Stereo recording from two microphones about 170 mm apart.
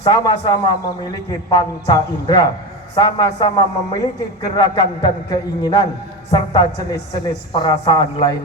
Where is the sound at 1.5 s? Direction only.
20° left (ahead or behind).